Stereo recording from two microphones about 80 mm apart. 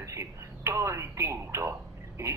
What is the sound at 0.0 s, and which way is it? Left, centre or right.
Speech, right.